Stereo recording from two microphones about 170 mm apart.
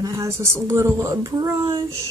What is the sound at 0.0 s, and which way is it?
Speech, 20° right (ahead or behind).